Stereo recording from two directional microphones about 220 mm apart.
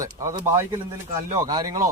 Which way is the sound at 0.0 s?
15° right (ahead or behind).